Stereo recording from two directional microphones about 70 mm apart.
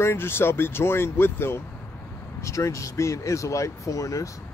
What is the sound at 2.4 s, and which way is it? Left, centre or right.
Speech, left.